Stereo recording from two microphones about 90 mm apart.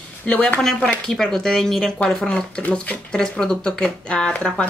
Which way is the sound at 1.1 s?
5° left (ahead or behind).